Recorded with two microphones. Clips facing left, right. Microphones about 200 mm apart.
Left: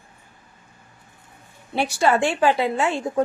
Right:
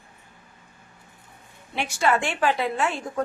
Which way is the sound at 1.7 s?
35° left (ahead or behind).